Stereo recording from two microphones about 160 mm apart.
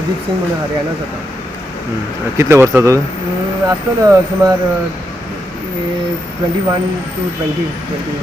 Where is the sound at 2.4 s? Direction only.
15° right (ahead or behind).